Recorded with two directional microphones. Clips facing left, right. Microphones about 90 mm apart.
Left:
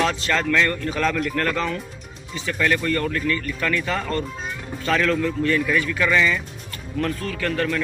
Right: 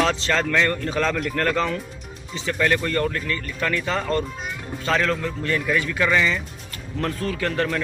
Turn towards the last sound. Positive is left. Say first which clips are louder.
# even
turn(degrees=-30)  # may be behind; listen again after turning